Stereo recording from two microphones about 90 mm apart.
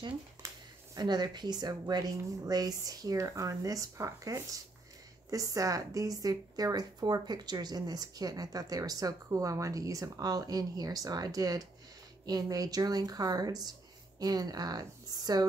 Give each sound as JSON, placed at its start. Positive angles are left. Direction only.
{"t": 0.9, "sound": "a woman's voice", "side_deg": -50}